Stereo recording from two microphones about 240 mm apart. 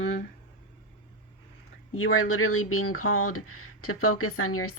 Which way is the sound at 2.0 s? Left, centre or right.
Left.